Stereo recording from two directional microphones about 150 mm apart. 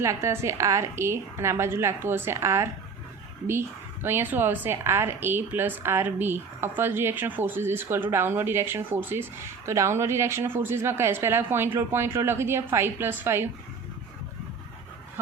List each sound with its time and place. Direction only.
0.0 s a woman's voice: 20° right (ahead or behind)
4.0 s a woman's voice: 15° right (ahead or behind)